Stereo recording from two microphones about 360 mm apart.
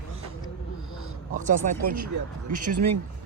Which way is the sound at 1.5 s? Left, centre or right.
Right.